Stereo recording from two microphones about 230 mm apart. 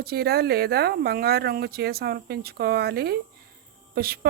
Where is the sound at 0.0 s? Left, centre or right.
Right.